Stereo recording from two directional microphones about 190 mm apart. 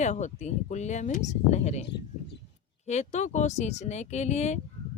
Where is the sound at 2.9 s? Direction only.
35° left (ahead or behind).